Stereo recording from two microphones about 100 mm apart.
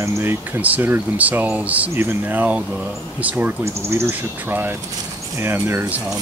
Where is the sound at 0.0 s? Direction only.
20° right (ahead or behind).